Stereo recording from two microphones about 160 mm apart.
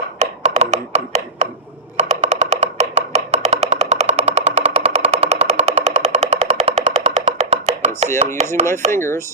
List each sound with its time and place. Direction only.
0.2 s chopping: 40° right (ahead or behind)
2.0 s music: 40° right (ahead or behind)
8.4 s chopping: 40° right (ahead or behind)
8.9 s speech: 15° left (ahead or behind)